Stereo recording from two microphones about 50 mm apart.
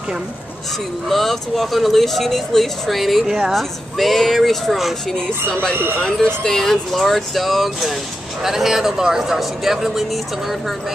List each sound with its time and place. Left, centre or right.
1.0 s speech: centre
5.5 s speech: left
6.2 s speech: centre